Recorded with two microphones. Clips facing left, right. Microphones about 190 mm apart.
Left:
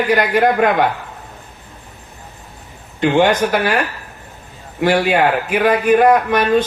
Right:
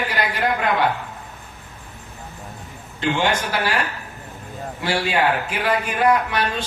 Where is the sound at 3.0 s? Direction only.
55° left (ahead or behind).